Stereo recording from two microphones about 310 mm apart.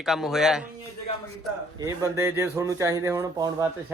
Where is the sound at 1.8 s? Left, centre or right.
Centre.